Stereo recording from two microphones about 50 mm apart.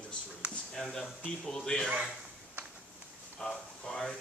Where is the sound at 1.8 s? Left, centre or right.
Centre.